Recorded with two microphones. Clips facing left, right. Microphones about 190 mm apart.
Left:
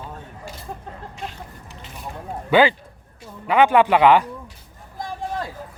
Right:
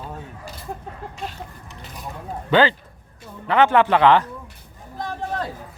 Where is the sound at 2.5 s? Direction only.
10° left (ahead or behind).